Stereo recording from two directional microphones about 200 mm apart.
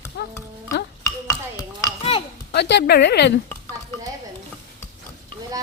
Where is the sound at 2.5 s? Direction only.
55° left (ahead or behind).